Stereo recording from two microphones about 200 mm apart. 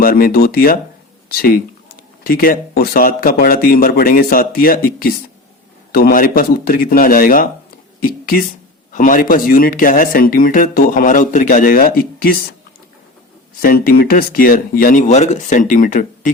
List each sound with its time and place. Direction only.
0.0 s speech: 45° left (ahead or behind)
8.9 s speech: 40° left (ahead or behind)
13.6 s speech: 45° left (ahead or behind)